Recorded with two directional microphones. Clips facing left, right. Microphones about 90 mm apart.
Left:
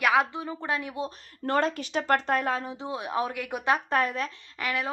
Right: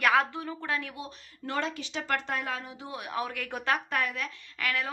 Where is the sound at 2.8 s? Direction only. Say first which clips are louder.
Left 3 dB; 25° left (ahead or behind).